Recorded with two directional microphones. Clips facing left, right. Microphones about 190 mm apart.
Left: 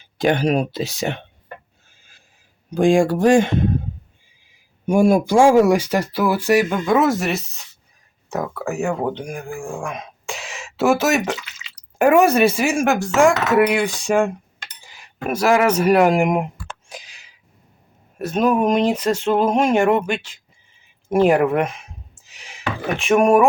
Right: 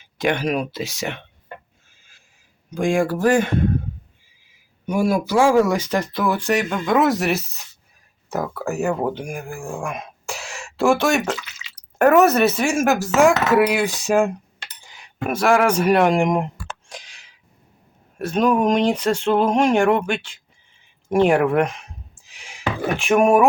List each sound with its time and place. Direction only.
0.0 s speech: 35° left (ahead or behind)
2.6 s speech: 30° left (ahead or behind)
4.9 s speech: 25° left (ahead or behind)
5.5 s speech: 10° left (ahead or behind)
11.9 s speech: 10° left (ahead or behind)
12.5 s speech: centre (ahead or behind)
14.8 s cutlery: 5° left (ahead or behind)
15.8 s speech: 5° left (ahead or behind)
16.9 s a sound: 5° left (ahead or behind)
18.2 s speech: 5° left (ahead or behind)
22.3 s a sound: centre (ahead or behind)